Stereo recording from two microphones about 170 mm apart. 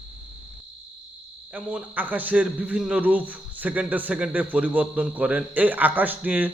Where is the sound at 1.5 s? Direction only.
10° right (ahead or behind).